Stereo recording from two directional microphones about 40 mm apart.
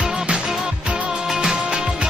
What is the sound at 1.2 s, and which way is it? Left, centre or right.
Music, centre.